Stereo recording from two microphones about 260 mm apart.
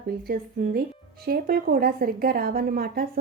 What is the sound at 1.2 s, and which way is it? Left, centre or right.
Speech, right.